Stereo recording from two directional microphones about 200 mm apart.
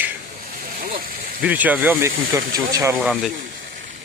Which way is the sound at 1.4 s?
10° right (ahead or behind).